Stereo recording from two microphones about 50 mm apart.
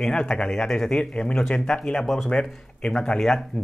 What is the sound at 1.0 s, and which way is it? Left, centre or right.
Speech, left.